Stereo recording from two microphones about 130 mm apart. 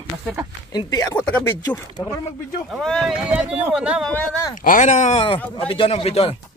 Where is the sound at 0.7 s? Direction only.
30° left (ahead or behind).